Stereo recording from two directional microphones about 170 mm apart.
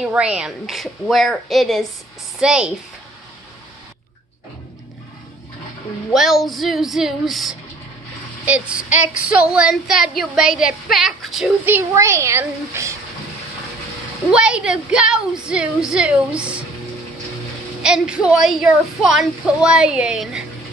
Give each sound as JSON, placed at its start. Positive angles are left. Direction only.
{"t": 0.0, "sound": "speech", "side_deg": -5}
{"t": 6.1, "sound": "speech", "side_deg": 0}
{"t": 11.6, "sound": "a woman's voice", "side_deg": -15}
{"t": 14.3, "sound": "speech", "side_deg": -5}
{"t": 17.8, "sound": "speech", "side_deg": -5}